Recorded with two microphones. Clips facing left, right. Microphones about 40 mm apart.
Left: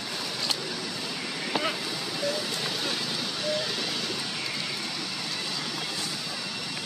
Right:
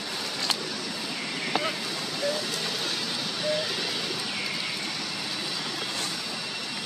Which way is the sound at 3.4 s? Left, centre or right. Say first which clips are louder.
Right 2 dB; centre.